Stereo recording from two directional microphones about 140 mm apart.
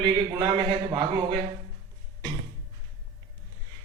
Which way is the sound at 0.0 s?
35° right (ahead or behind).